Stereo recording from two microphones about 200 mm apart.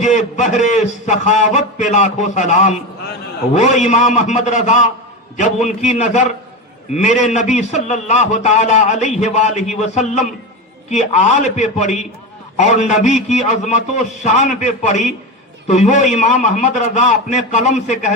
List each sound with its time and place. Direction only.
0.0 s a man's voice: 35° left (ahead or behind)
6.9 s a man's voice: 35° left (ahead or behind)
15.6 s a man's voice: 35° left (ahead or behind)